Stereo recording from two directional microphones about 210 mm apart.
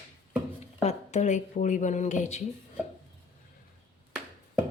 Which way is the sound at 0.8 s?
30° left (ahead or behind).